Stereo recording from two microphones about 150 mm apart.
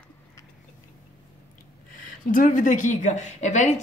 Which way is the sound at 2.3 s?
60° left (ahead or behind).